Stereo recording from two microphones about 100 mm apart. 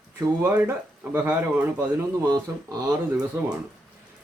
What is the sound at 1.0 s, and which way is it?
Speech, 15° right (ahead or behind).